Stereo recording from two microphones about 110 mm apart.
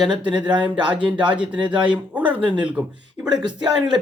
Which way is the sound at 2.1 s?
15° right (ahead or behind).